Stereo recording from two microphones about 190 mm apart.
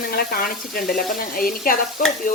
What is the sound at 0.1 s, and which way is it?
Speech, 50° left (ahead or behind).